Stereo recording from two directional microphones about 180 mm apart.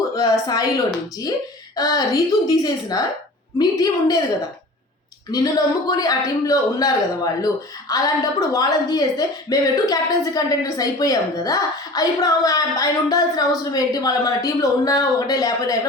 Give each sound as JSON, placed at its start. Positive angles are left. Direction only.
{"t": 0.2, "sound": "speech", "side_deg": 20}
{"t": 1.7, "sound": "speech", "side_deg": 20}
{"t": 5.3, "sound": "speech", "side_deg": 20}